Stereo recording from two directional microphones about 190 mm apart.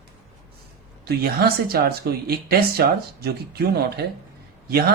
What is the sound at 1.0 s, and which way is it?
Speech, 55° right (ahead or behind).